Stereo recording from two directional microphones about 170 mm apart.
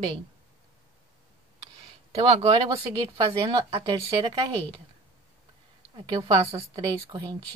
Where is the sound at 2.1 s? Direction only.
40° right (ahead or behind).